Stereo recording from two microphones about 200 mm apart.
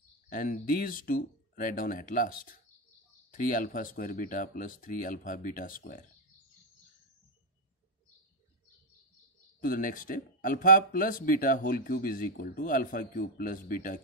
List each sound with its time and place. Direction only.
0.3 s speech: 45° left (ahead or behind)
9.6 s speech: 45° left (ahead or behind)